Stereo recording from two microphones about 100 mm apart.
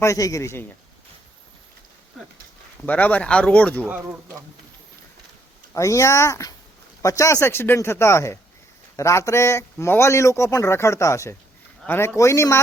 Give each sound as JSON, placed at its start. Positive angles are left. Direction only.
{"t": 0.0, "sound": "speech", "side_deg": 30}
{"t": 2.8, "sound": "speech", "side_deg": 15}
{"t": 3.8, "sound": "speech", "side_deg": -15}
{"t": 5.7, "sound": "a man's voice", "side_deg": 30}